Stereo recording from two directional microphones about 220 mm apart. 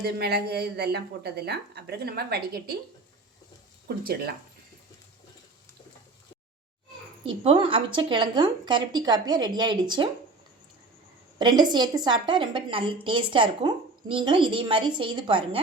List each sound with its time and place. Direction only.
0.0 s a woman's voice: 45° right (ahead or behind)
3.8 s a woman's voice: 45° right (ahead or behind)
7.3 s a woman's voice: 25° right (ahead or behind)
11.3 s a woman's voice: 20° right (ahead or behind)